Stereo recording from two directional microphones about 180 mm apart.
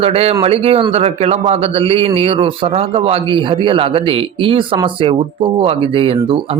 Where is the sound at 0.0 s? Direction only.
35° right (ahead or behind).